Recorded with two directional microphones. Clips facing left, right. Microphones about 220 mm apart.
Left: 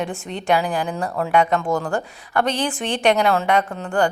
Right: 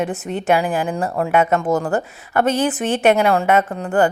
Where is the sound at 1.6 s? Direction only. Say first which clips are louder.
Right 3 dB; 20° right (ahead or behind).